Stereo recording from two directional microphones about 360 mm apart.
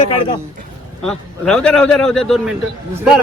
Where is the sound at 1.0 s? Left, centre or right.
Centre.